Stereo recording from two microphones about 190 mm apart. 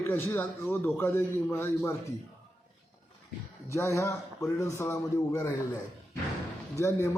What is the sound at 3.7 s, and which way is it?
Speech, 15° left (ahead or behind).